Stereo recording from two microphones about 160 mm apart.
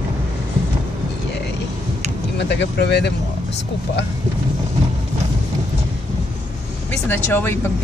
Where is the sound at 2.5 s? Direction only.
90° left.